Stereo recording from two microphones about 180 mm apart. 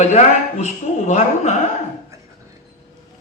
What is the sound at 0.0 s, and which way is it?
A man's voice, 40° left (ahead or behind).